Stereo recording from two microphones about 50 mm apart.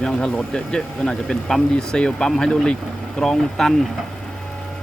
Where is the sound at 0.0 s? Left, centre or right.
Centre.